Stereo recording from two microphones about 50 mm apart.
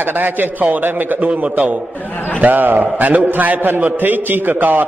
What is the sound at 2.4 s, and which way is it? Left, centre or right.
A man's voice, right.